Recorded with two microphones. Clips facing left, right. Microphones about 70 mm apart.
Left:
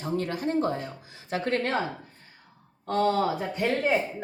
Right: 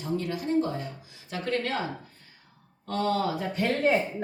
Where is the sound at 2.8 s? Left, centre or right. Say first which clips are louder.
Left 3 dB; left.